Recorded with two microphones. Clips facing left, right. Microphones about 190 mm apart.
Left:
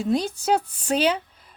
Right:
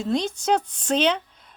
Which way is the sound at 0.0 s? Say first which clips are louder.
Left 1 dB; 5° left (ahead or behind).